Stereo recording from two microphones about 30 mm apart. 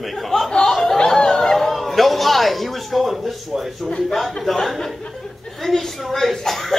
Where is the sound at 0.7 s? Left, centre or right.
Centre.